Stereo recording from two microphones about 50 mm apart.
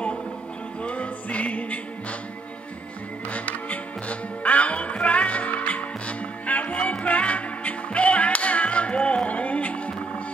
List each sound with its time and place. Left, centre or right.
0.8 s music: left
3.3 s music: left